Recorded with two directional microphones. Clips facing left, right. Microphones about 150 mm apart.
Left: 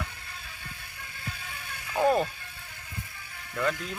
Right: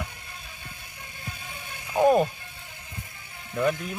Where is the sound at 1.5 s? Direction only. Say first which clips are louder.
Right 1 dB; 20° right (ahead or behind).